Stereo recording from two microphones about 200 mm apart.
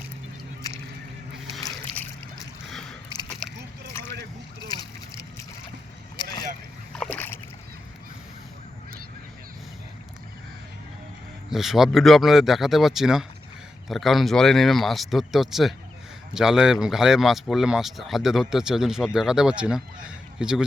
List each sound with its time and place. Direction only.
1.6 s boat: 10° left (ahead or behind)
3.9 s boat: 15° left (ahead or behind)
4.7 s splash: 20° left (ahead or behind)
7.0 s boat: 10° left (ahead or behind)
11.5 s speech: centre (ahead or behind)